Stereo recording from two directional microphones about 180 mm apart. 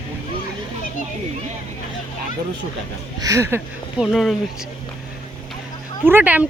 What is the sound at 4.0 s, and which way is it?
Speech, centre (ahead or behind).